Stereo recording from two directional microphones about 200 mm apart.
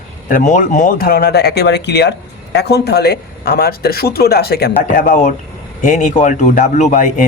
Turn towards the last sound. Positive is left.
turn(degrees=40)  # may be behind; listen again after turning